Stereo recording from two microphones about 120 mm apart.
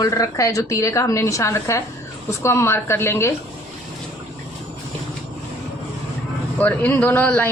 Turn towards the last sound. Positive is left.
turn(degrees=15)  # may be behind; listen again after turning